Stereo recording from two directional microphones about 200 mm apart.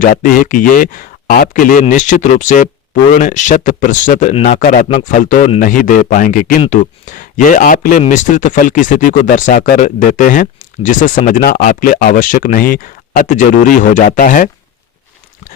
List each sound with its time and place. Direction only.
0.0 s speech: 40° left (ahead or behind)